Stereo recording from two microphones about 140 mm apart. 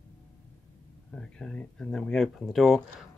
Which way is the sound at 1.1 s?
5° left (ahead or behind).